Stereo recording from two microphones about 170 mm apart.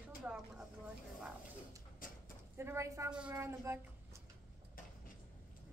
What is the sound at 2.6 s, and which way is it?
Speech, 15° right (ahead or behind).